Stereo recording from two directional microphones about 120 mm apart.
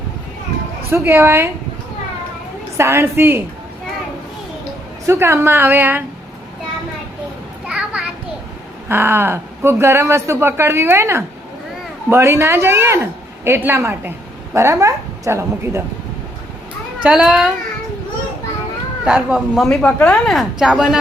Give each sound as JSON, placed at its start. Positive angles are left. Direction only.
{"t": 0.9, "sound": "a man's voice", "side_deg": -20}
{"t": 2.7, "sound": "a man's voice", "side_deg": -25}
{"t": 5.0, "sound": "a man's voice", "side_deg": -25}
{"t": 7.7, "sound": "children playing", "side_deg": -10}
{"t": 8.9, "sound": "a man's voice", "side_deg": -20}
{"t": 17.0, "sound": "speech", "side_deg": -5}
{"t": 19.0, "sound": "speech", "side_deg": -5}
{"t": 19.6, "sound": "speech", "side_deg": 5}